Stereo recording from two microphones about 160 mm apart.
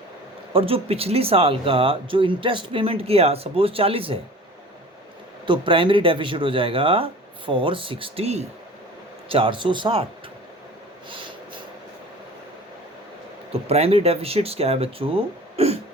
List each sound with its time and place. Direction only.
0.5 s speech: 35° right (ahead or behind)
5.5 s speech: 35° right (ahead or behind)
13.5 s speech: 40° right (ahead or behind)